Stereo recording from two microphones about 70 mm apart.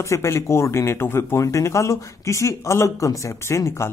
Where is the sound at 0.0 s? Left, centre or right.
Left.